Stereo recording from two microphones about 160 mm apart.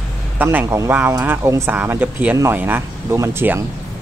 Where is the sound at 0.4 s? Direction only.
10° right (ahead or behind).